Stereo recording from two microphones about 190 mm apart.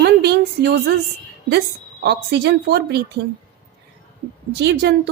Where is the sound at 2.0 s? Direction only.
65° right (ahead or behind).